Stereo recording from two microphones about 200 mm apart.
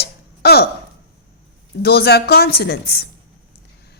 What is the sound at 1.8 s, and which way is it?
A woman's voice, 50° left (ahead or behind).